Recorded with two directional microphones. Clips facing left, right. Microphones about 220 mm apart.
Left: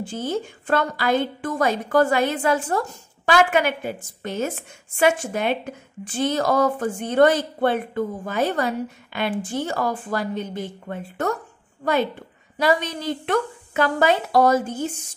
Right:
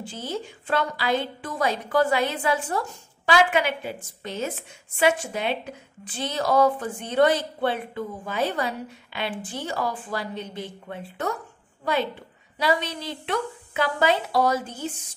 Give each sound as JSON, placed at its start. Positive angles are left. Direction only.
{"t": 0.0, "sound": "a woman's voice", "side_deg": 50}